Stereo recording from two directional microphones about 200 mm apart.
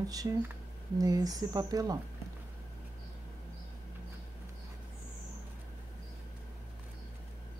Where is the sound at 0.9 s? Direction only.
20° right (ahead or behind).